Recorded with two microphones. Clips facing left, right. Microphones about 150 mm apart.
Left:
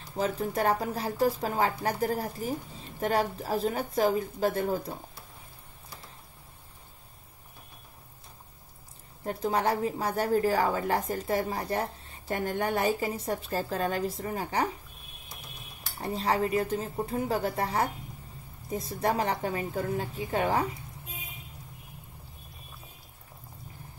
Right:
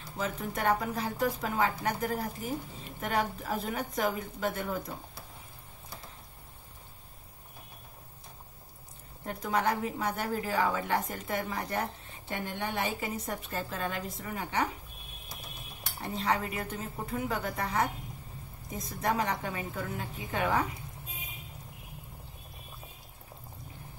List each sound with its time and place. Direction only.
0.2 s a woman's voice: 35° left (ahead or behind)
9.2 s a woman's voice: 30° left (ahead or behind)
16.0 s a woman's voice: 35° left (ahead or behind)